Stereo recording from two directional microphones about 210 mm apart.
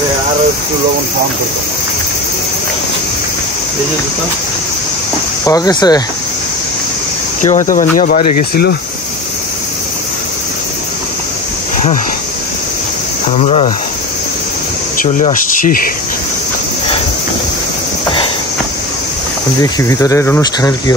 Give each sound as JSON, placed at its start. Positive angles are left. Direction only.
{"t": 5.4, "sound": "speech", "side_deg": 20}
{"t": 7.4, "sound": "speech", "side_deg": 40}
{"t": 13.4, "sound": "speech", "side_deg": 30}
{"t": 15.0, "sound": "speech", "side_deg": 35}
{"t": 19.6, "sound": "speech", "side_deg": 15}